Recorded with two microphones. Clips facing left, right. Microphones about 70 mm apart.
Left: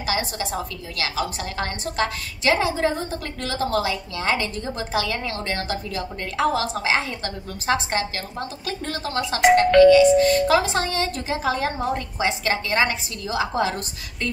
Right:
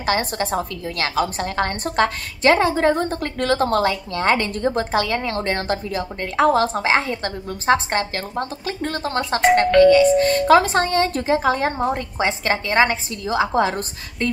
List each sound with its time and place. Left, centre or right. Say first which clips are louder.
0.0 s a woman's voice: right 4 dB; right